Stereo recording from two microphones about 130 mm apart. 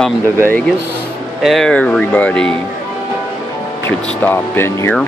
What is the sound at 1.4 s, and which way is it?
Speech, centre (ahead or behind).